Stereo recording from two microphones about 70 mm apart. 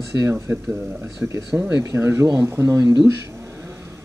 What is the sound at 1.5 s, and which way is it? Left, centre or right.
Speech, centre.